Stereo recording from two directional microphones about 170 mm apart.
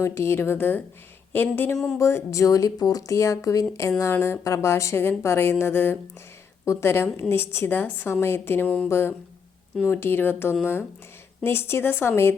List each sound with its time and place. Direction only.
0.0 s speech: 15° left (ahead or behind)
2.0 s speech: 15° left (ahead or behind)